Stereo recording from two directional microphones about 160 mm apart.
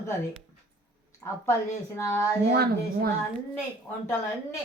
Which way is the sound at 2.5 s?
75° right (ahead or behind).